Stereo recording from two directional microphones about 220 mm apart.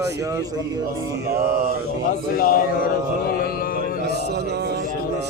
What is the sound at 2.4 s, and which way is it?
Speech, 40° left (ahead or behind).